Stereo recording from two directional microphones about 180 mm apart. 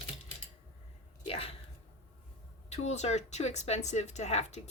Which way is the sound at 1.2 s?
35° left (ahead or behind).